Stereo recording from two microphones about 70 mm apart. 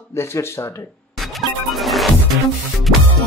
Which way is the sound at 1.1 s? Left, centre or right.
Centre.